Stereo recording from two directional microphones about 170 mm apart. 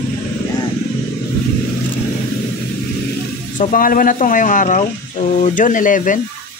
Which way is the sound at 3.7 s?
55° left (ahead or behind).